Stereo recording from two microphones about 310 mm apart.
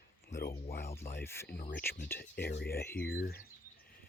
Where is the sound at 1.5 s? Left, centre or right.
Left.